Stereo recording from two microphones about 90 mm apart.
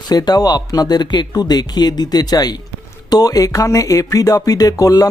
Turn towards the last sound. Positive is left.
turn(degrees=45)  # may be behind; listen again after turning